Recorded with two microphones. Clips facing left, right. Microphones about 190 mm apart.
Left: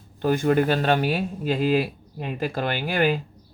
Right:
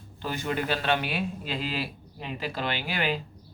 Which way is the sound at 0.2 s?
50° left (ahead or behind).